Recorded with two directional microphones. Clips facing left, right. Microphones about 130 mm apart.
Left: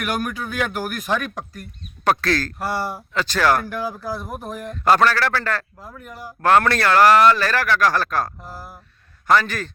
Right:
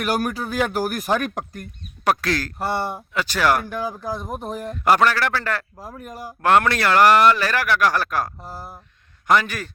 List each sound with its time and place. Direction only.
0.0 s speech: 35° right (ahead or behind)
2.0 s a man's voice: 15° right (ahead or behind)
2.6 s speech: 25° right (ahead or behind)
3.1 s a man's voice: 10° right (ahead or behind)
4.4 s speech: 30° right (ahead or behind)
4.7 s a man's voice: 10° right (ahead or behind)
5.7 s speech: 30° right (ahead or behind)
6.0 s speech: 45° right (ahead or behind)
6.4 s a man's voice: 10° right (ahead or behind)
8.4 s speech: 30° right (ahead or behind)
9.2 s a man's voice: 15° right (ahead or behind)